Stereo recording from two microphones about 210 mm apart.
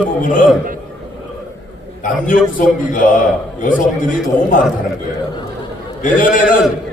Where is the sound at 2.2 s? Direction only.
40° left (ahead or behind).